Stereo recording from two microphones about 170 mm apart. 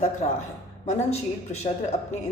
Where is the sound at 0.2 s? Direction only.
35° left (ahead or behind).